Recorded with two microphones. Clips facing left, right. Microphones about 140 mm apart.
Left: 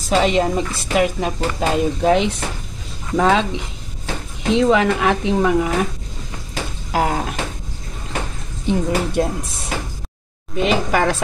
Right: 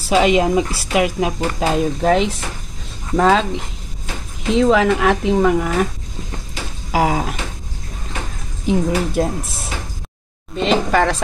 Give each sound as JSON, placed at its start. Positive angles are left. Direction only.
{"t": 0.0, "sound": "speech", "side_deg": -5}
{"t": 6.9, "sound": "speech", "side_deg": -5}
{"t": 8.6, "sound": "speech", "side_deg": 0}
{"t": 10.5, "sound": "speech", "side_deg": 5}